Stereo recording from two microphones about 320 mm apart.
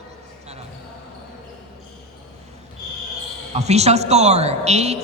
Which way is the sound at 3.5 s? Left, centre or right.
Centre.